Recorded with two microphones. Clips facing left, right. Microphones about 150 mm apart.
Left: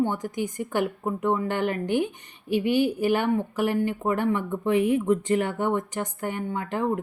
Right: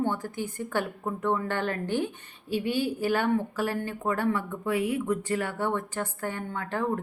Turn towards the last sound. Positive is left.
turn(degrees=15)  # may be behind; listen again after turning